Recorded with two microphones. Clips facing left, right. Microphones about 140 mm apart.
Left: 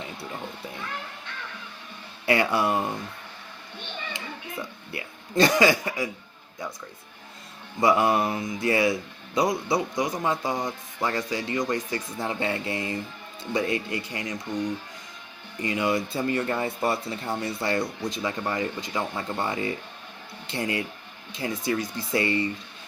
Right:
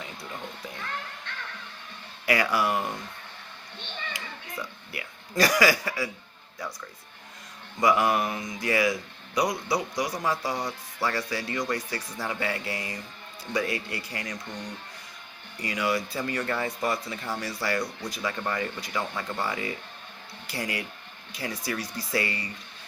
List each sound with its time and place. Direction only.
2.2 s speech: 25° left (ahead or behind)
4.1 s a sound: 25° left (ahead or behind)
7.8 s speech: 25° left (ahead or behind)
15.5 s speech: 25° left (ahead or behind)